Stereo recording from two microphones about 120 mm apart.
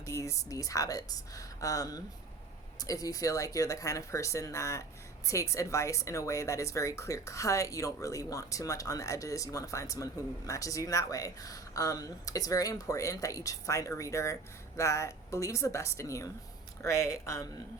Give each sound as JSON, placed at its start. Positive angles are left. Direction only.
{"t": 0.0, "sound": "speech", "side_deg": 25}